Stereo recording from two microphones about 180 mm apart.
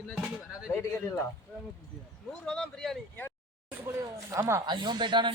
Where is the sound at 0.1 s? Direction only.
Centre (ahead or behind).